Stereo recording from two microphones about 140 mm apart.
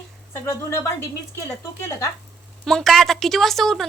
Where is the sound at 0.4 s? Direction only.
15° left (ahead or behind).